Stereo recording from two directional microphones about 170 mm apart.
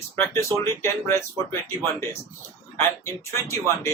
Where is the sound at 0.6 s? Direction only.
15° left (ahead or behind).